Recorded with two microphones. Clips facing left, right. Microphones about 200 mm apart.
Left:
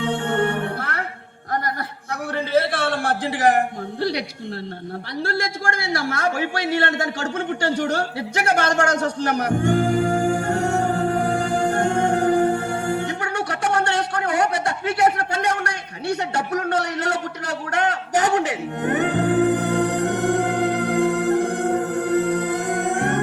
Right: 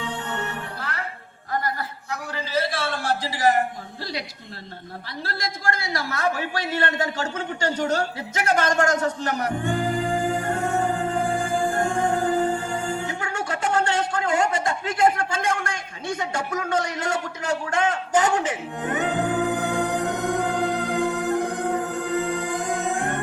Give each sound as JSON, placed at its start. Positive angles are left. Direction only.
{"t": 0.3, "sound": "music", "side_deg": 55}
{"t": 0.5, "sound": "music", "side_deg": 65}
{"t": 2.3, "sound": "a sound", "side_deg": 60}
{"t": 5.2, "sound": "a man's voice", "side_deg": 50}
{"t": 6.8, "sound": "speech", "side_deg": 75}
{"t": 9.6, "sound": "music", "side_deg": 80}
{"t": 14.8, "sound": "a man's voice", "side_deg": 70}
{"t": 16.6, "sound": "a sound", "side_deg": 65}